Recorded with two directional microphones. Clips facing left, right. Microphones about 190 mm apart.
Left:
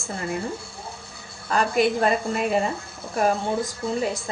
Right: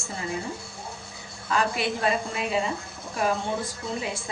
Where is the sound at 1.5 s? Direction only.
45° left (ahead or behind).